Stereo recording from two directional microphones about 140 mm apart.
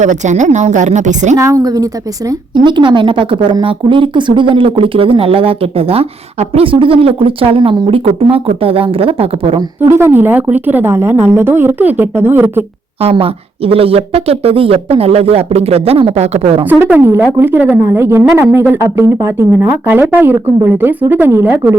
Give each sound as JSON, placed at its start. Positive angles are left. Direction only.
{"t": 0.0, "sound": "a woman's voice", "side_deg": -60}
{"t": 1.4, "sound": "a woman's voice", "side_deg": -25}
{"t": 9.9, "sound": "speech", "side_deg": -15}
{"t": 13.0, "sound": "speech", "side_deg": -45}
{"t": 16.8, "sound": "speech", "side_deg": -15}